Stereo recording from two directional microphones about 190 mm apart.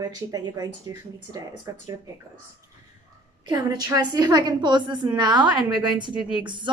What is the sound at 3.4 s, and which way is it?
A woman's voice, 20° right (ahead or behind).